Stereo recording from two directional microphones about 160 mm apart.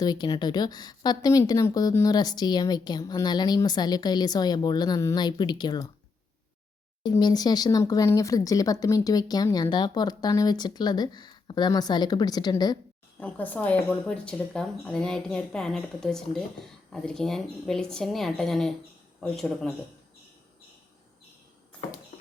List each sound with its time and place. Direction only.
0.0 s speech: 25° left (ahead or behind)
7.0 s speech: 25° left (ahead or behind)
13.1 s speech: 10° left (ahead or behind)
22.1 s clip-clop: 40° left (ahead or behind)